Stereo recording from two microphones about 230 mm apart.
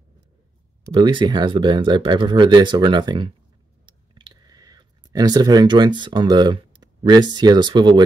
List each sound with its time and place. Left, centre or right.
0.9 s speech: centre
3.8 s clicking: right